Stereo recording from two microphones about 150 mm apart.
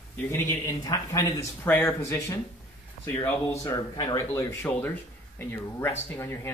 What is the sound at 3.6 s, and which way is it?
Speech, 25° left (ahead or behind).